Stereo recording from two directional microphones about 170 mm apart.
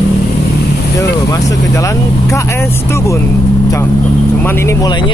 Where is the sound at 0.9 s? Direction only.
20° left (ahead or behind).